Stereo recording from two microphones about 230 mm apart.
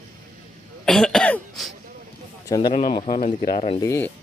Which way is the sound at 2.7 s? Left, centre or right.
Left.